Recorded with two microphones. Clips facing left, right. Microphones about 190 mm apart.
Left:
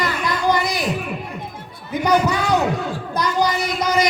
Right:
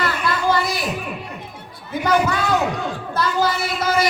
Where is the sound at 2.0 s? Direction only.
20° left (ahead or behind).